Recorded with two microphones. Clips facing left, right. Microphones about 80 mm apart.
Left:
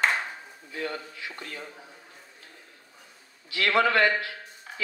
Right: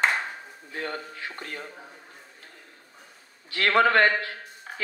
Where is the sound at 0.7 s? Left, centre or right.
Right.